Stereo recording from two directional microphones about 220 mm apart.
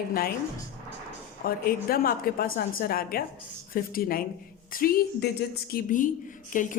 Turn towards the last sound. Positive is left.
turn(degrees=35)  # may be behind; listen again after turning